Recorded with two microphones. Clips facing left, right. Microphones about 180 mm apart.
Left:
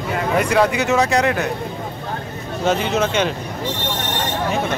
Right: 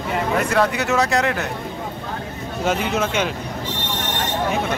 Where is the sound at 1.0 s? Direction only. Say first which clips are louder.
Left 2 dB; centre (ahead or behind).